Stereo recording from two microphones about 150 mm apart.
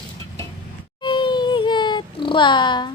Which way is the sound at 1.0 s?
30° left (ahead or behind).